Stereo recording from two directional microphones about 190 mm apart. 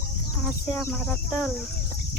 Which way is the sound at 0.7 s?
5° left (ahead or behind).